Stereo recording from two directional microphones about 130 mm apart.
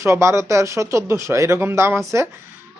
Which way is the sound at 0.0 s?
20° right (ahead or behind).